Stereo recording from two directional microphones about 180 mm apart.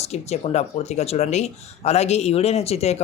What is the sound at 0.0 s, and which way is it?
A man's voice, 35° left (ahead or behind).